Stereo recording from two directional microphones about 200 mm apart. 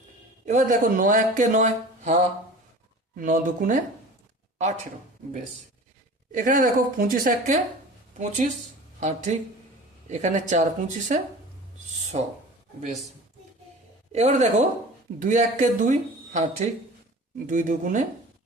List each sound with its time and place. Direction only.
0.4 s a man's voice: 40° right (ahead or behind)
3.2 s a woman's voice: 45° right (ahead or behind)
6.3 s a woman's voice: 40° right (ahead or behind)
9.0 s a man's voice: 35° right (ahead or behind)
14.1 s a man's voice: 35° right (ahead or behind)